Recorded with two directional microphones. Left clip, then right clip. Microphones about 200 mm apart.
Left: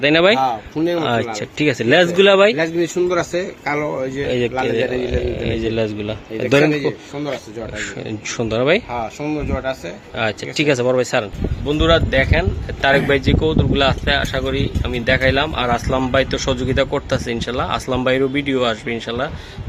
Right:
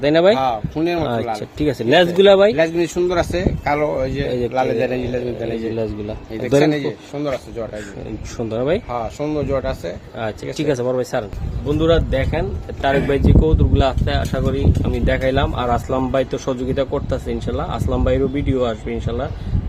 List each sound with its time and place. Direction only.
0.0 s speech: centre (ahead or behind)
0.3 s speech: 20° right (ahead or behind)
1.0 s speech: centre (ahead or behind)
2.6 s a man's voice: 40° right (ahead or behind)
5.7 s speech: centre (ahead or behind)
8.4 s speech: 5° left (ahead or behind)
9.3 s speech: 40° right (ahead or behind)
10.2 s speech: 10° left (ahead or behind); by 19.3 s 5° right (ahead or behind)